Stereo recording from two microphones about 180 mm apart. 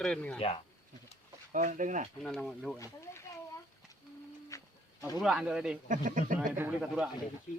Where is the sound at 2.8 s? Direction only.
15° left (ahead or behind).